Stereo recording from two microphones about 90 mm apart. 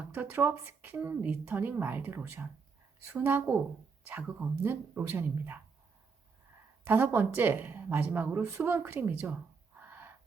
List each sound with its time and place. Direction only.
0.1 s speech: 25° right (ahead or behind)
6.8 s speech: 20° right (ahead or behind)